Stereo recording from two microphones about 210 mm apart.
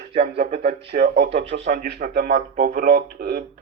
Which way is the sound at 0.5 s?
30° right (ahead or behind).